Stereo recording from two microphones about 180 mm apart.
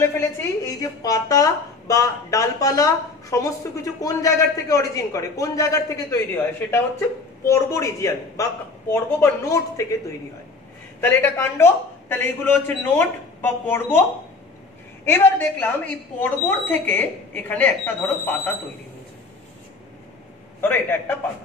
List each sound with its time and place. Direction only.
0.0 s a woman's voice: 15° left (ahead or behind)
11.0 s a woman's voice: 10° left (ahead or behind)
15.0 s a woman's voice: 10° left (ahead or behind)
20.6 s a woman's voice: 10° left (ahead or behind)